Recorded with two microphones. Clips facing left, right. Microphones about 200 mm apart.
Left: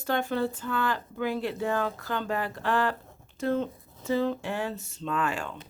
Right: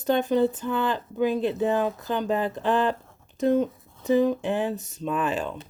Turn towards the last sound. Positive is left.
turn(degrees=-20)  # may be behind; listen again after turning